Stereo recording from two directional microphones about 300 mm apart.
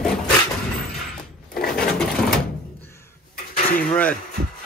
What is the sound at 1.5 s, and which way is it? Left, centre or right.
Sewing machine, left.